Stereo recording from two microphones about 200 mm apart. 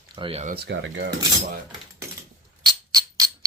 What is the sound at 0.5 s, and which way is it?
Speech, 60° right (ahead or behind).